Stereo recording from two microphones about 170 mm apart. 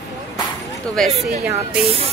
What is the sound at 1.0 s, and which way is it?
Speech, 5° left (ahead or behind).